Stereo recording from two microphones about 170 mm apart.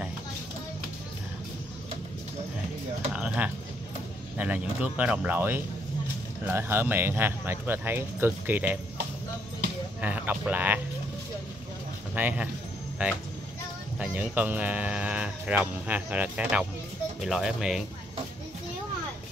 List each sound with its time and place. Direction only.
3.1 s speech: 10° right (ahead or behind)
10.0 s speech: 10° right (ahead or behind)
12.2 s speech: 10° right (ahead or behind)